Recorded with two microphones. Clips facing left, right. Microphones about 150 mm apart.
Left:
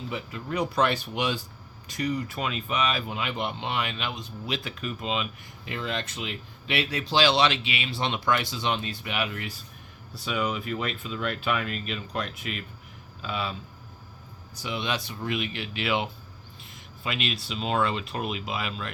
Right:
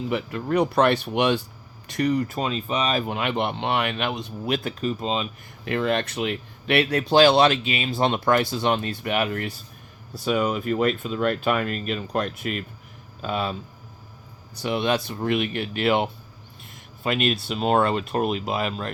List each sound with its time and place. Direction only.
0.1 s speech: 60° right (ahead or behind)
2.2 s speech: 40° right (ahead or behind)
3.1 s speech: 60° right (ahead or behind)
4.8 s speech: 35° right (ahead or behind)
5.6 s speech: 60° right (ahead or behind)
14.5 s speech: 60° right (ahead or behind)